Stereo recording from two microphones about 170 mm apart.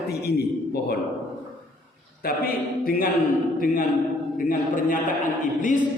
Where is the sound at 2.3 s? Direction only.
60° left (ahead or behind).